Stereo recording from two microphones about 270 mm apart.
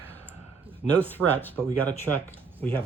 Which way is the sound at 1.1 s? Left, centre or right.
Centre.